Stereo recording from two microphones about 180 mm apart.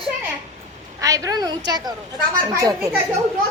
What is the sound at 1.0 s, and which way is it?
Speech, 20° right (ahead or behind).